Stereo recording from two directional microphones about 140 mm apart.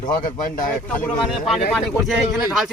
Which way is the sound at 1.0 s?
5° left (ahead or behind).